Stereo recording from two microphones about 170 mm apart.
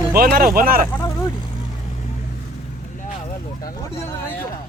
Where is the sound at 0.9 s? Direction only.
15° left (ahead or behind).